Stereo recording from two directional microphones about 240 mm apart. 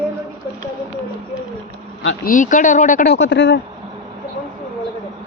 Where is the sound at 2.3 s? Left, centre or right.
Left.